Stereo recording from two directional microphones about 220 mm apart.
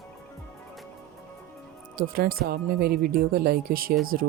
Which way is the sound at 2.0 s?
40° right (ahead or behind).